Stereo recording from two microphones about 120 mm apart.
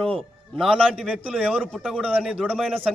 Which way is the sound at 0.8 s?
10° right (ahead or behind).